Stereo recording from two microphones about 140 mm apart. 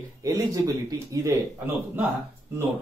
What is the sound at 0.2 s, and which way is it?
Speech, 25° right (ahead or behind).